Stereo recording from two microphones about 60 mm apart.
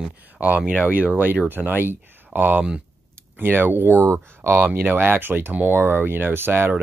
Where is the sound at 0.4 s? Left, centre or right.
Right.